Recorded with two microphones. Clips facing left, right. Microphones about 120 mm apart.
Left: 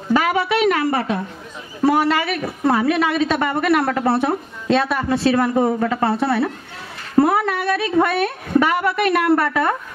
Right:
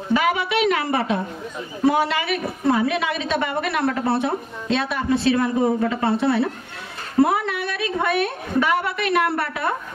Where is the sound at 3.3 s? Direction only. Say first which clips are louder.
Left 5 dB; 55° left (ahead or behind).